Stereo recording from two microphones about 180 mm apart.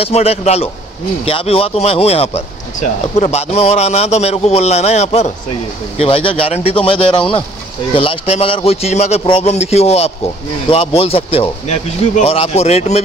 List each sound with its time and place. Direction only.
0.0 s speech: 35° left (ahead or behind)